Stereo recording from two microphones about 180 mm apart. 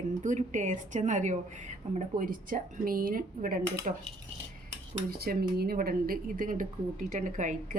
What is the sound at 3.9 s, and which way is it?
Speech, 40° right (ahead or behind).